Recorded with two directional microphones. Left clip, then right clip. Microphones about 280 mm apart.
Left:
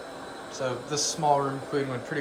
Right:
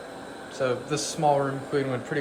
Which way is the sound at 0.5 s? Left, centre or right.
Centre.